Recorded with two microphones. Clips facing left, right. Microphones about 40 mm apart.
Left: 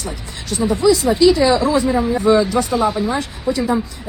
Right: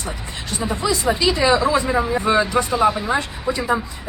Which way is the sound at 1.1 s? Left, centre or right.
Centre.